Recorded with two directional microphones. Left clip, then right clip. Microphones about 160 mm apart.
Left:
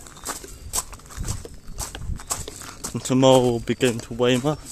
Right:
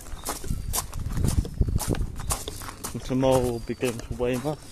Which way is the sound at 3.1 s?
50° left (ahead or behind).